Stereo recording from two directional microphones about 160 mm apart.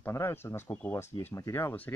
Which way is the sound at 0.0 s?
15° left (ahead or behind).